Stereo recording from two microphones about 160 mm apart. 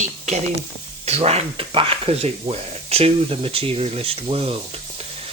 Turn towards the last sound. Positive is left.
turn(degrees=-35)  # may be behind; listen again after turning